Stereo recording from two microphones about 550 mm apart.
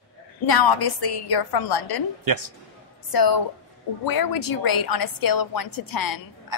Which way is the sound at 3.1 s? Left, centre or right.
Left.